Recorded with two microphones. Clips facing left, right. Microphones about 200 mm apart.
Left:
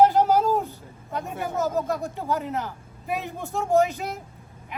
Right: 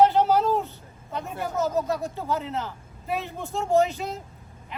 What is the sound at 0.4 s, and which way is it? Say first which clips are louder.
Vehicle: left 1 dB; 10° left (ahead or behind).